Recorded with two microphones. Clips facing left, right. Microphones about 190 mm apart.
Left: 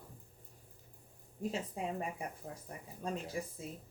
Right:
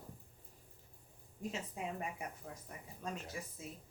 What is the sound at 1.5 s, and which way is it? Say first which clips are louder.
A woman's voice: left 3 dB; 35° left (ahead or behind).